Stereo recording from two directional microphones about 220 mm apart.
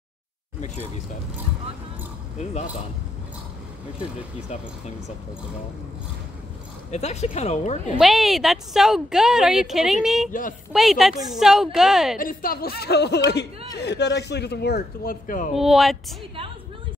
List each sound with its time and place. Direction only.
4.5 s speech: 30° left (ahead or behind)
6.9 s speech: 30° left (ahead or behind)
8.0 s a woman's voice: centre (ahead or behind)
12.2 s speech: 40° left (ahead or behind)
15.5 s a woman's voice: centre (ahead or behind)